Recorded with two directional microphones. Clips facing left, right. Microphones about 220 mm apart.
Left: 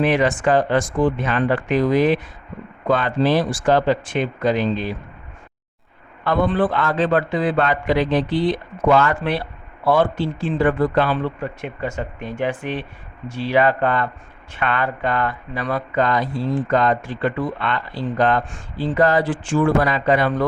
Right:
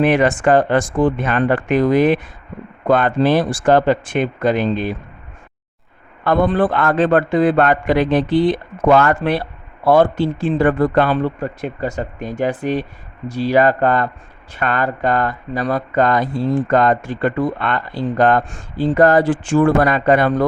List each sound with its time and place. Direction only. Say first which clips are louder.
0.0 s speech: right 3 dB; 50° right (ahead or behind)
6.2 s speech: right 3 dB; 45° right (ahead or behind)